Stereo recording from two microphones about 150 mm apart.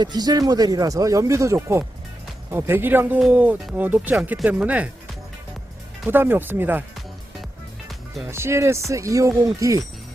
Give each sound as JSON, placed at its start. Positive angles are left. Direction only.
{"t": 0.0, "sound": "speech", "side_deg": -25}
{"t": 6.1, "sound": "speech", "side_deg": -15}
{"t": 8.3, "sound": "speech", "side_deg": -15}